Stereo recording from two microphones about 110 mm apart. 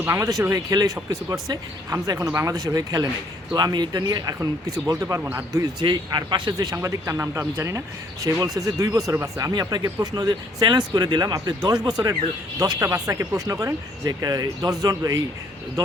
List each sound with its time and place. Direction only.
0.0 s speech: 25° right (ahead or behind)
4.4 s speech: 25° right (ahead or behind)
5.8 s speech: 45° right (ahead or behind)
12.8 s speech: 30° right (ahead or behind)